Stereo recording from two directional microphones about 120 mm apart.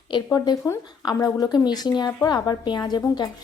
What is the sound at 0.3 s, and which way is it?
A woman's voice, 30° left (ahead or behind).